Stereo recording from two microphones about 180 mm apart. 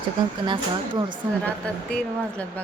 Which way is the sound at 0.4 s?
25° right (ahead or behind).